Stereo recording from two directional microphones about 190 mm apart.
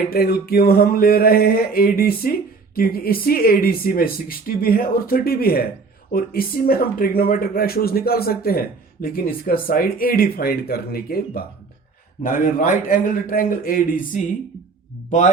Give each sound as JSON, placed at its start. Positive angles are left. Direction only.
{"t": 0.1, "sound": "speech", "side_deg": 55}